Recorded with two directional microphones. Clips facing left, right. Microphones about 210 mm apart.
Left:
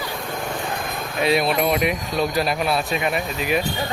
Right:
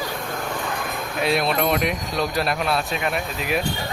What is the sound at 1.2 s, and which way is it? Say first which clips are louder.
Speech: left 2 dB; centre (ahead or behind).